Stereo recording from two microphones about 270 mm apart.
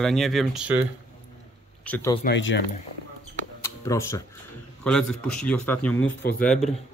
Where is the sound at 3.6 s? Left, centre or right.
Centre.